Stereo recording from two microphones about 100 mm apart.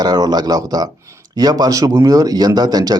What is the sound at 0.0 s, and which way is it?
A man's voice, 40° right (ahead or behind).